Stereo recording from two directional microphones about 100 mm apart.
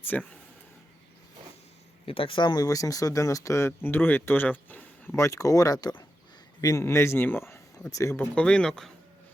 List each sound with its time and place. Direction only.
0.0 s a man's voice: 20° left (ahead or behind)
2.0 s speech: 65° left (ahead or behind); by 4.9 s 15° left (ahead or behind)
5.1 s a man's voice: 30° left (ahead or behind)
8.1 s a man's voice: 20° left (ahead or behind)
8.4 s speech: 5° left (ahead or behind)